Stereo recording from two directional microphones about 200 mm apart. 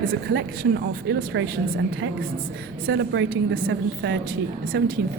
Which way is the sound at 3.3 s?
45° right (ahead or behind).